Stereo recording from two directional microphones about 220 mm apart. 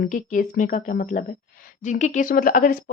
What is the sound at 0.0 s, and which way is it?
Speech, 35° left (ahead or behind).